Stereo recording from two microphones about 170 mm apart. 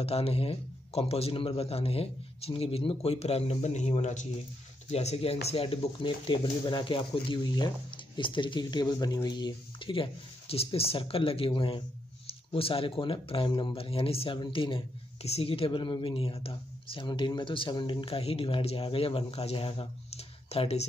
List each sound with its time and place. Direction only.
0.0 s speech: 35° left (ahead or behind)